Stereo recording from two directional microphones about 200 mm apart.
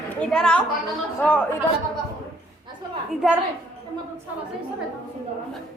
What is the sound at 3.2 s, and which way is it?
Speech, centre (ahead or behind).